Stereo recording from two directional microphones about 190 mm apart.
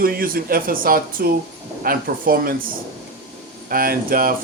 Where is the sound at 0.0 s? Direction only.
50° right (ahead or behind).